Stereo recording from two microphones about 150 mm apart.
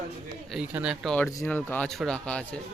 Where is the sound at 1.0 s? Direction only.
5° left (ahead or behind).